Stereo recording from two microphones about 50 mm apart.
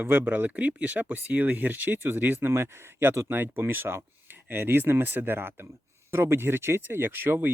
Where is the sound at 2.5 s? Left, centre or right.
Right.